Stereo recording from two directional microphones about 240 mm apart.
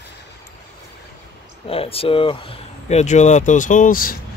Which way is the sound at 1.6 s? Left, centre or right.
Left.